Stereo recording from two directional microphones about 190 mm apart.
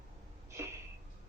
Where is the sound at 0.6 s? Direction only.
15° right (ahead or behind).